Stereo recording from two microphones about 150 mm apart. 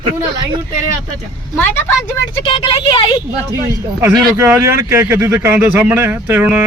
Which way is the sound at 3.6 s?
20° right (ahead or behind).